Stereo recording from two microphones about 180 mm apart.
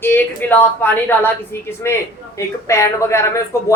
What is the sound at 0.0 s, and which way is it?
A woman's voice, 10° left (ahead or behind).